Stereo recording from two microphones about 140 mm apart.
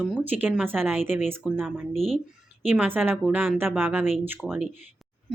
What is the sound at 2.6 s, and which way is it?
A woman's voice, 15° right (ahead or behind).